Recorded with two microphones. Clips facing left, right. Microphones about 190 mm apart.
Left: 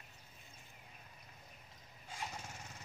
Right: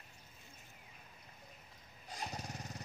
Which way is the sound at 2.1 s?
40° right (ahead or behind).